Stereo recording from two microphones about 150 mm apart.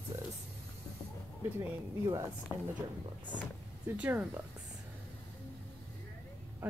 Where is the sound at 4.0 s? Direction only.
10° right (ahead or behind).